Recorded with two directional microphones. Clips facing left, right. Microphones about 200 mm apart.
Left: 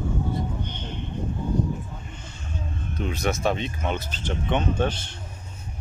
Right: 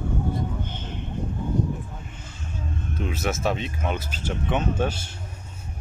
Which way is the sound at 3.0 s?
5° right (ahead or behind).